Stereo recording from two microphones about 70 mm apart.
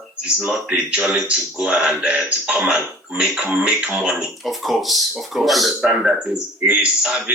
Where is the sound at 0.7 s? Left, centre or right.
Centre.